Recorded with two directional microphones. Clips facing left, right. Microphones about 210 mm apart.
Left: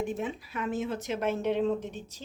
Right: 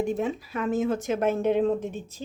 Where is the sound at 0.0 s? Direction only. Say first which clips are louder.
Right 6 dB; 40° right (ahead or behind).